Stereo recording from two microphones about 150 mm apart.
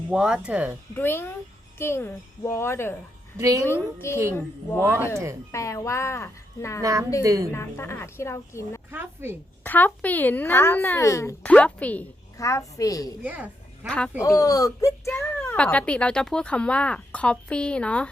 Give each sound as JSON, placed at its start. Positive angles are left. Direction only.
{"t": 0.1, "sound": "speech", "side_deg": -5}
{"t": 0.9, "sound": "speech", "side_deg": 15}
{"t": 3.3, "sound": "a woman's voice", "side_deg": -20}
{"t": 4.0, "sound": "speech", "side_deg": 20}
{"t": 7.2, "sound": "a woman's voice", "side_deg": -25}
{"t": 7.5, "sound": "speech", "side_deg": 15}
{"t": 8.9, "sound": "speech", "side_deg": -15}
{"t": 9.6, "sound": "speech", "side_deg": 10}
{"t": 11.4, "sound": "speech", "side_deg": 10}
{"t": 12.4, "sound": "speech", "side_deg": 20}
{"t": 13.2, "sound": "speech", "side_deg": -10}
{"t": 13.8, "sound": "speech", "side_deg": 5}
{"t": 14.3, "sound": "speech", "side_deg": 25}